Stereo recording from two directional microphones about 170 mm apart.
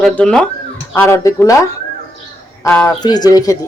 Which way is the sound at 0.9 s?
15° left (ahead or behind).